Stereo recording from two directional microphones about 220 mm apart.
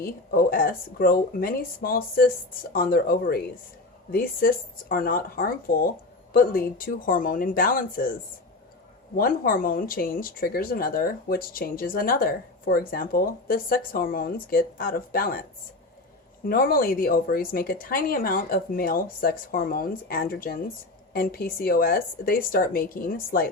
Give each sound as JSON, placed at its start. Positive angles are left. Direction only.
{"t": 0.0, "sound": "speech", "side_deg": 40}
{"t": 9.1, "sound": "speech", "side_deg": 40}
{"t": 16.5, "sound": "speech", "side_deg": 40}